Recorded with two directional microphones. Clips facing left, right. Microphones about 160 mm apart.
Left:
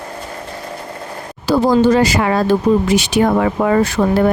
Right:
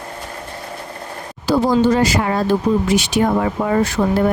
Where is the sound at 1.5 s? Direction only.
90° left.